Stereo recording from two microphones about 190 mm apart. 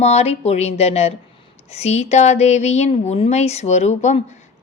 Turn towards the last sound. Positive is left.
turn(degrees=35)  # may be behind; listen again after turning